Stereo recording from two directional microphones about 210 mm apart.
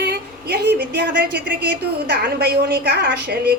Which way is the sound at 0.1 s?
55° right (ahead or behind).